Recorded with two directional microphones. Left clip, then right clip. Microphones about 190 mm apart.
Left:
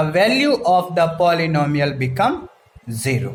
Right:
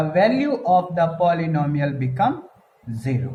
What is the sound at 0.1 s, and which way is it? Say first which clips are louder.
A man's voice: left 1 dB; 45° left (ahead or behind).